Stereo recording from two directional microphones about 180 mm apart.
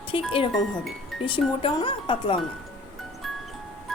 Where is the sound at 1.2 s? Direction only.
25° left (ahead or behind).